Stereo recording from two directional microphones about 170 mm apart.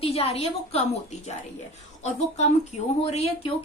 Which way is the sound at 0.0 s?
35° left (ahead or behind).